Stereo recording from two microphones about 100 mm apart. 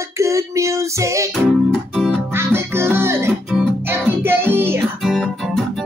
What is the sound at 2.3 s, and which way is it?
Music, 25° right (ahead or behind).